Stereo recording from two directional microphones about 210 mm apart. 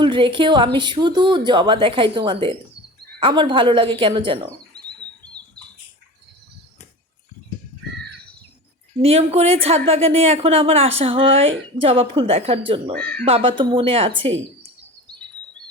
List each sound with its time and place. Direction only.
0.0 s speech: 25° right (ahead or behind)
5.4 s rodents: 20° right (ahead or behind)
9.0 s speech: 30° right (ahead or behind)
13.0 s speech: 5° left (ahead or behind)
13.2 s speech: 25° right (ahead or behind)